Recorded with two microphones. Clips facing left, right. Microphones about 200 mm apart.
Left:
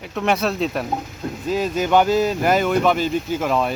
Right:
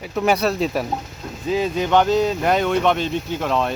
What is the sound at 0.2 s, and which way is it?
Speech, centre (ahead or behind).